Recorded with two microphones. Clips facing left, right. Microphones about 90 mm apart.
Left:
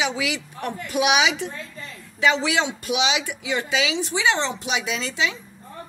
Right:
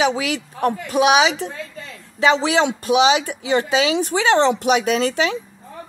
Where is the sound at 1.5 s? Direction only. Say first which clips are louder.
Right 3 dB; 90° right.